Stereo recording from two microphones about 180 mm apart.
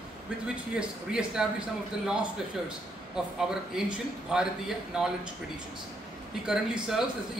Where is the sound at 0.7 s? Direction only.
5° right (ahead or behind).